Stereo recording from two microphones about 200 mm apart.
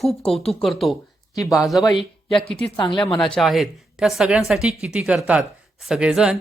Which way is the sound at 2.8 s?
20° left (ahead or behind).